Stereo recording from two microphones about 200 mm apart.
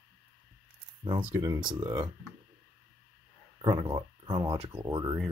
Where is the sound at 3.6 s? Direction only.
25° right (ahead or behind).